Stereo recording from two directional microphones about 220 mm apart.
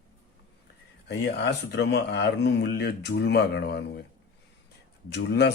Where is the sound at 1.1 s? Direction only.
50° left (ahead or behind).